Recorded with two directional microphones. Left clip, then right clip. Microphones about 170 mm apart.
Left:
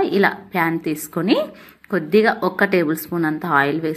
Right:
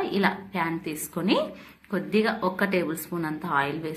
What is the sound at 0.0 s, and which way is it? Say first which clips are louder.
A woman's voice: left 8 dB; 40° left (ahead or behind).